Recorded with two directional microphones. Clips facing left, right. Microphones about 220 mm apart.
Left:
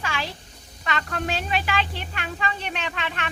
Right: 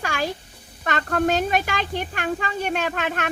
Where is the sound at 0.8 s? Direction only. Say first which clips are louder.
Right 7 dB; 50° right (ahead or behind).